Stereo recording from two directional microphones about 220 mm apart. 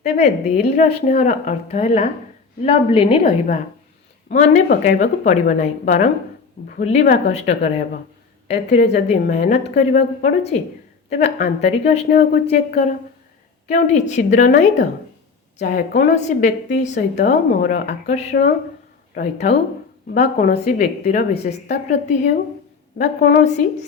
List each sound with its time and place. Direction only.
0.2 s a woman's voice: 45° left (ahead or behind)
0.8 s a woman's voice: 35° left (ahead or behind)
8.8 s a woman's voice: 50° left (ahead or behind)
9.5 s a woman's voice: 30° left (ahead or behind)
19.1 s a woman's voice: 45° left (ahead or behind)